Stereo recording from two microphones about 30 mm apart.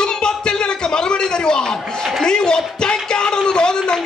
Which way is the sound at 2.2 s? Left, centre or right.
Left.